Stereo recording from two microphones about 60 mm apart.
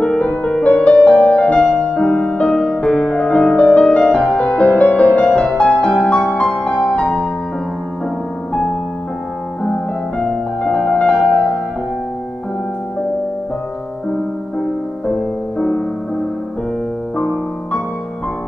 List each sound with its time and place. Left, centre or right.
0.0 s music: centre
10.1 s music: centre
17.2 s music: centre